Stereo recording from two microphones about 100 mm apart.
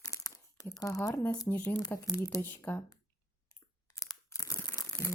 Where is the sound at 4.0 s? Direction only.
35° left (ahead or behind).